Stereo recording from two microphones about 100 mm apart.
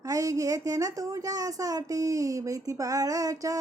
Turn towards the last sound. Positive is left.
turn(degrees=-35)  # may be behind; listen again after turning